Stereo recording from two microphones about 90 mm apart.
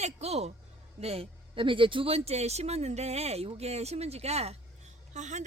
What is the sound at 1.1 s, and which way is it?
A man's voice, 80° right.